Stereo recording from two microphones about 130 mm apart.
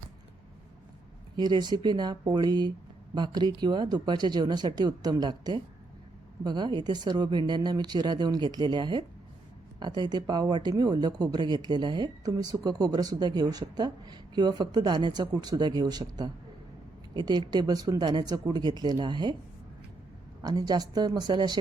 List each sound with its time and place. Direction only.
1.4 s speech: 35° right (ahead or behind)
20.4 s speech: 30° right (ahead or behind)